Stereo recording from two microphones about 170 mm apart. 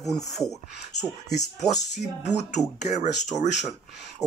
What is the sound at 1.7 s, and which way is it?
Speech, 45° left (ahead or behind).